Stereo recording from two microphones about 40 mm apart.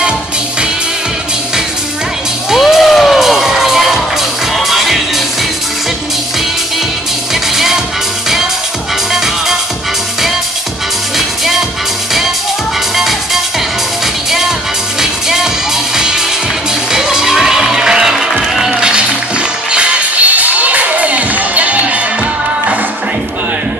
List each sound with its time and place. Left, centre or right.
2.5 s music: centre
7.5 s music: centre
9.1 s music: centre
11.1 s music: centre
12.9 s music: centre
15.0 s music: centre
16.9 s music: centre
18.8 s music: right